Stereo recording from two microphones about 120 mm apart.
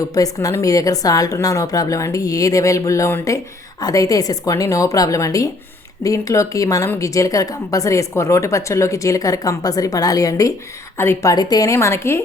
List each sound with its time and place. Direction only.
0.1 s a woman's voice: 30° left (ahead or behind)